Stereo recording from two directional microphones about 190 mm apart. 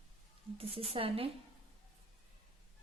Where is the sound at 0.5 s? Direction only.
30° right (ahead or behind).